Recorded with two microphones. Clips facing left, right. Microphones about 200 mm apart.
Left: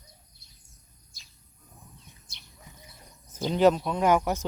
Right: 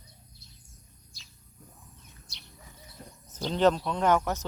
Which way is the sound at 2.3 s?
50° left (ahead or behind).